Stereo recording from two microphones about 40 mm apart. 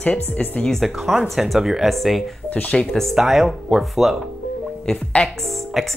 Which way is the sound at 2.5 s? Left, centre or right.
Left.